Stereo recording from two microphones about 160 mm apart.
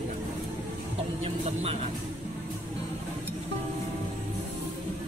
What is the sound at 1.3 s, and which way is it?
Vehicle, 35° right (ahead or behind).